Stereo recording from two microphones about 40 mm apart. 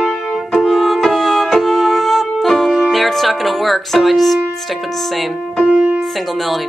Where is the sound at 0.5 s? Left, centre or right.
Centre.